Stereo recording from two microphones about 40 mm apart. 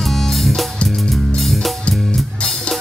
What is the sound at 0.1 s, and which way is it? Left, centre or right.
Music, centre.